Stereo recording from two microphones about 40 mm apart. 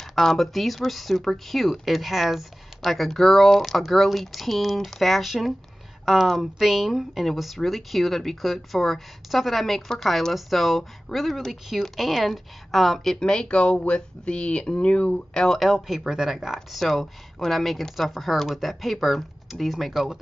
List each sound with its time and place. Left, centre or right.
0.0 s speech: centre
13.2 s speech: left
15.7 s speech: centre
16.5 s speech: centre